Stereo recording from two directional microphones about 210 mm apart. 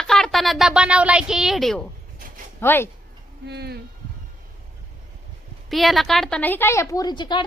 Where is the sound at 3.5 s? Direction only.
50° right (ahead or behind).